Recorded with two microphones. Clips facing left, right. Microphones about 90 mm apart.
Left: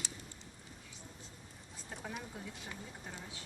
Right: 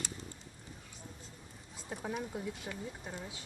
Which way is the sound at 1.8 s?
5° right (ahead or behind).